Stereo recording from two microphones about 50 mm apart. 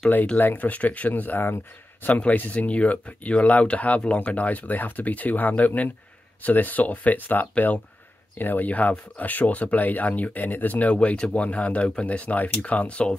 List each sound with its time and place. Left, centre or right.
0.4 s speech: left
11.0 s speech: left